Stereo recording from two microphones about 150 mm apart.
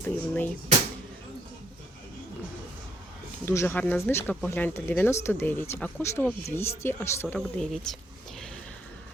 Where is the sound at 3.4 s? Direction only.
15° left (ahead or behind).